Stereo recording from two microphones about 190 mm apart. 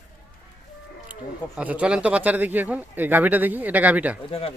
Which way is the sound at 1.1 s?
10° right (ahead or behind).